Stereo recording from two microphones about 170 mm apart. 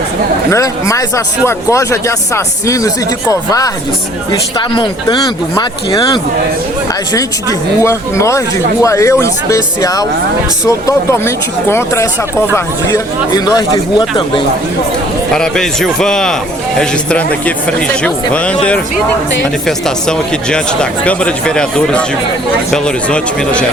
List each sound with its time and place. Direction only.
0.5 s speech: 20° left (ahead or behind)
7.8 s speech: 15° left (ahead or behind)
15.4 s a man's voice: 5° left (ahead or behind)
19.6 s a man's voice: 5° left (ahead or behind)